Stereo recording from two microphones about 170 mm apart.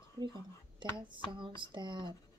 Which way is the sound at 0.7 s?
30° right (ahead or behind).